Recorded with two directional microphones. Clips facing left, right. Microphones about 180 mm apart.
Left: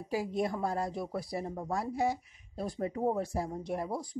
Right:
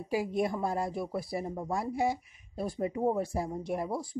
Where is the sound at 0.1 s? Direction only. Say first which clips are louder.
Right 2 dB; 15° right (ahead or behind).